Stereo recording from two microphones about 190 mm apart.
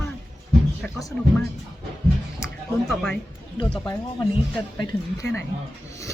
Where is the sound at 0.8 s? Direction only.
15° left (ahead or behind).